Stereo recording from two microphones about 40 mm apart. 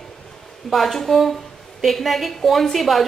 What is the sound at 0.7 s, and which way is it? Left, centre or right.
A woman's voice, centre.